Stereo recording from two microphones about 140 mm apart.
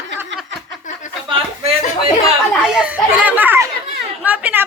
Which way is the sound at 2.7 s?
5° right (ahead or behind).